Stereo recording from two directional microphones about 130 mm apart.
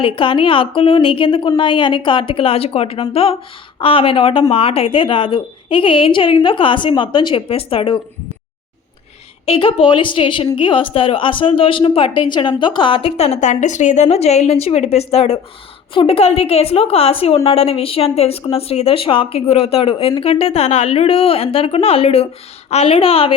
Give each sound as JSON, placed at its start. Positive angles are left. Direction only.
{"t": 0.0, "sound": "a woman's voice", "side_deg": 40}
{"t": 9.5, "sound": "a woman's voice", "side_deg": 45}